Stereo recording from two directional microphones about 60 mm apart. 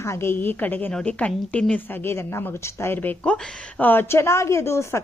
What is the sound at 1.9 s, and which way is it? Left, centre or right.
A woman's voice, left.